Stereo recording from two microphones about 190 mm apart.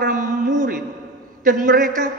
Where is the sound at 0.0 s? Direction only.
45° right (ahead or behind).